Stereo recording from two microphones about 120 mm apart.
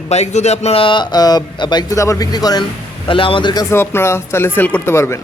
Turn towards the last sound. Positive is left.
turn(degrees=20)  # may be behind; listen again after turning